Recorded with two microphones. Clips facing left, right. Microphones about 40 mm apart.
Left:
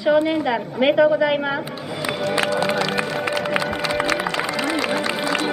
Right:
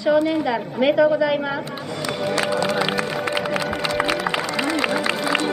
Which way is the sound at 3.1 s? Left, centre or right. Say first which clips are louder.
Left 1 dB; centre.